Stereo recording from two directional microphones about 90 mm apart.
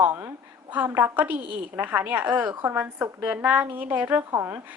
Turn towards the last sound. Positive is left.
turn(degrees=-30)  # may be behind; listen again after turning